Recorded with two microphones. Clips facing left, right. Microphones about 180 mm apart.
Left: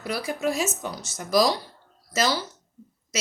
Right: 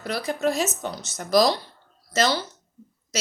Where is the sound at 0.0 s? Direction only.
10° left (ahead or behind).